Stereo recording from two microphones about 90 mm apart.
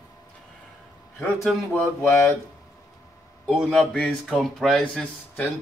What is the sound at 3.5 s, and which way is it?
Speech, centre (ahead or behind).